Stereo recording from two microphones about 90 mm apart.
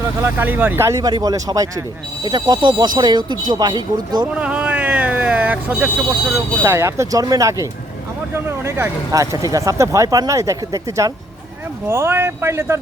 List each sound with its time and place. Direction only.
0.2 s speech: 25° right (ahead or behind)
0.9 s speech: 35° right (ahead or behind)
4.3 s vehicle: 15° right (ahead or behind)
6.3 s speech: 30° right (ahead or behind)